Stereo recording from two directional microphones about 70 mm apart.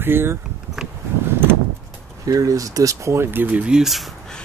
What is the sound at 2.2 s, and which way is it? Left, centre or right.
Speech, right.